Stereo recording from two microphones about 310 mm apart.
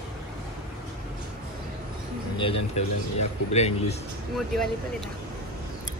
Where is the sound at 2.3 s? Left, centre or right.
Centre.